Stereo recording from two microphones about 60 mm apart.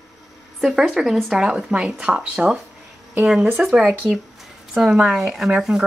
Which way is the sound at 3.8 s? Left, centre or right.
Right.